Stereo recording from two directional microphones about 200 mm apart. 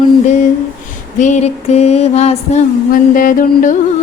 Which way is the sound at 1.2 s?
35° left (ahead or behind).